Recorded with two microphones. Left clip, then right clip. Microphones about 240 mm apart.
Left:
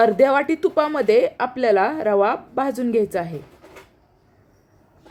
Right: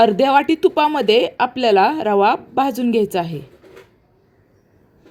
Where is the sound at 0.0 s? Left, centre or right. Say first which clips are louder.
Right 2 dB; right.